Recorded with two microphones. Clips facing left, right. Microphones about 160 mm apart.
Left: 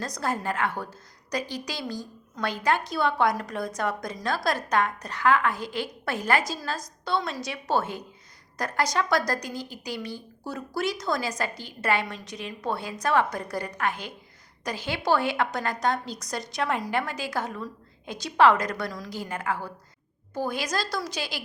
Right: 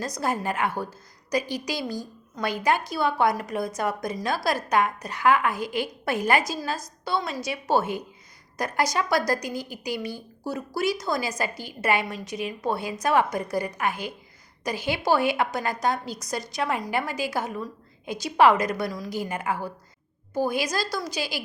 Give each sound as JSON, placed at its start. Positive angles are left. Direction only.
{"t": 0.0, "sound": "a woman's voice", "side_deg": -10}